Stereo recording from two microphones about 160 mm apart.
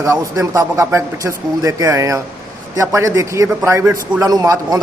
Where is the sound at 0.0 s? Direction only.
20° right (ahead or behind).